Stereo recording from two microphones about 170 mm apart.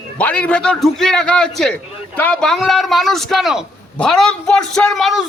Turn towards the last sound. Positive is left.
turn(degrees=0)  # may be behind; listen again after turning